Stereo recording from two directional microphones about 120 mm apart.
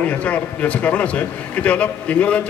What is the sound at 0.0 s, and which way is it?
A man's voice, 10° left (ahead or behind).